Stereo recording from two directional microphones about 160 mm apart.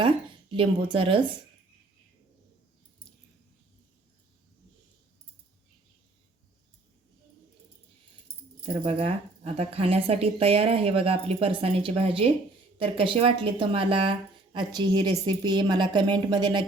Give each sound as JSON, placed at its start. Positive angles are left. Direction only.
{"t": 0.5, "sound": "speech", "side_deg": -35}
{"t": 8.6, "sound": "speech", "side_deg": -35}